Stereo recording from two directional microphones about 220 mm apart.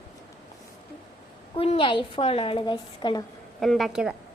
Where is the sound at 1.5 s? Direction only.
25° left (ahead or behind).